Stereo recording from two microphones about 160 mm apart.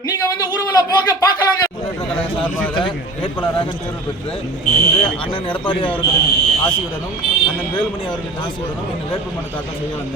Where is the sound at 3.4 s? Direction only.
30° left (ahead or behind).